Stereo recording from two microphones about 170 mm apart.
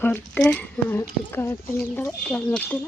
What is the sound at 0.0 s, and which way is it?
Speech, 10° left (ahead or behind).